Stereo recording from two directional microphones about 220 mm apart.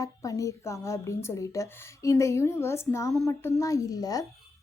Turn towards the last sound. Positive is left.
turn(degrees=15)  # may be behind; listen again after turning